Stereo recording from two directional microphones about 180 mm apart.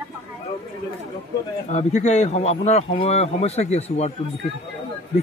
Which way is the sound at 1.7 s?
40° left (ahead or behind).